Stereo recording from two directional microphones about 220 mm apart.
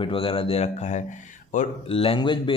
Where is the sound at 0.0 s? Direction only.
25° left (ahead or behind).